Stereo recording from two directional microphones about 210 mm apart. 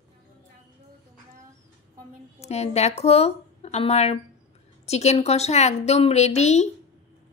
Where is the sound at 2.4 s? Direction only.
30° left (ahead or behind).